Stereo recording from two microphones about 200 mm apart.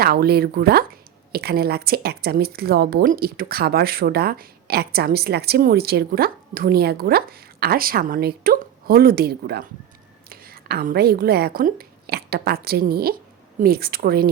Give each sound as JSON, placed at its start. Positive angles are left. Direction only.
{"t": 0.0, "sound": "a woman's voice", "side_deg": -50}